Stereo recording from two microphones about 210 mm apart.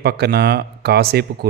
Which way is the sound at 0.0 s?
50° right (ahead or behind).